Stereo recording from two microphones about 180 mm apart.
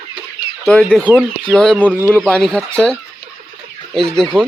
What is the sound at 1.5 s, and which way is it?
Speech, 5° left (ahead or behind).